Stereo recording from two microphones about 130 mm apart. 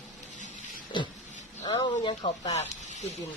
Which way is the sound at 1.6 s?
35° left (ahead or behind).